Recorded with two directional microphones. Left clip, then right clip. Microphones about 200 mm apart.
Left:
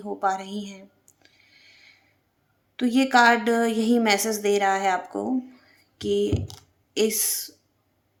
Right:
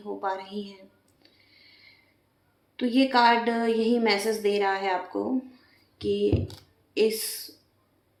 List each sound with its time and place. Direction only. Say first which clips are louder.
0.0 s a woman's voice: left 5 dB; 50° left (ahead or behind)
1.2 s a sound: left 2 dB; 45° left (ahead or behind)
2.7 s a woman's voice: left 3 dB; 45° left (ahead or behind)